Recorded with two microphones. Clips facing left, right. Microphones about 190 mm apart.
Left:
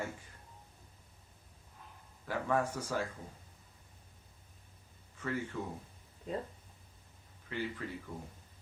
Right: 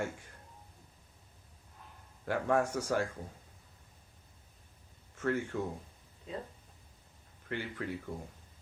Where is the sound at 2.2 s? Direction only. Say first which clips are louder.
Right 3 dB; 80° right.